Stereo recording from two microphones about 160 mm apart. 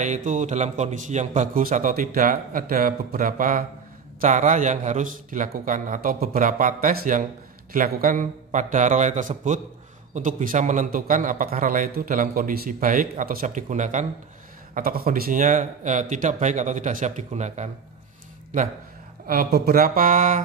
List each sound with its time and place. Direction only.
0.0 s a man's voice: 50° right (ahead or behind)
14.7 s a man's voice: 65° right (ahead or behind)
19.2 s a man's voice: 70° right (ahead or behind); by 20.4 s 55° right (ahead or behind)